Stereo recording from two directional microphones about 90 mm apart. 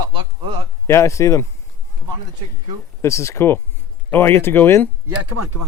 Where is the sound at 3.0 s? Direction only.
35° left (ahead or behind).